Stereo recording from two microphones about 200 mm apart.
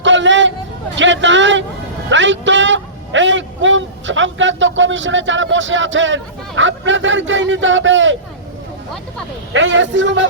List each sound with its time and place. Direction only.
0.0 s hubbub: 65° right (ahead or behind)
0.9 s a man's voice: 65° right (ahead or behind)
9.5 s a man's voice: 70° right (ahead or behind)